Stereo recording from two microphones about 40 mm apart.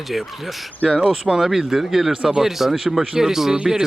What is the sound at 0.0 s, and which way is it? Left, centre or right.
Speech, centre.